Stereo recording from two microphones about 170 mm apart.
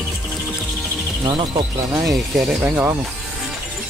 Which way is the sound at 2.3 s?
5° right (ahead or behind).